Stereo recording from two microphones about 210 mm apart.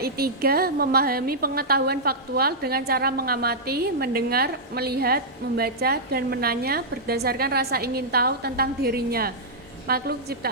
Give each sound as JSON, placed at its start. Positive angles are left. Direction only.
{"t": 0.0, "sound": "a woman's voice", "side_deg": -45}